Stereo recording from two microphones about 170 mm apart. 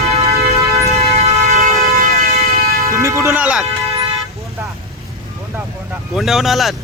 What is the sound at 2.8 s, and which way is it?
Speech, 15° right (ahead or behind).